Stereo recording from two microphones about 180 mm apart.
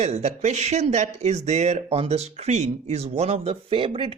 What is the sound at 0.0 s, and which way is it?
Speech, 35° right (ahead or behind).